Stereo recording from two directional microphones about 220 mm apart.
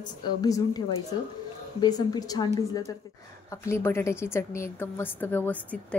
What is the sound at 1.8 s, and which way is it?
A woman's voice, 15° left (ahead or behind).